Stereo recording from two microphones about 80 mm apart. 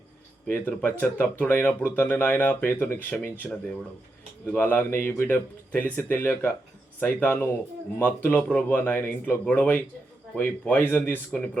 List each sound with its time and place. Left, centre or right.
0.4 s speech: left